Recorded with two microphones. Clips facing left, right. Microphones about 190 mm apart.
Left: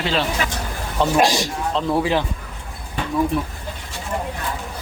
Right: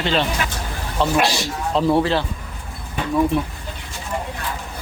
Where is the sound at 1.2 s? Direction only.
45° left (ahead or behind).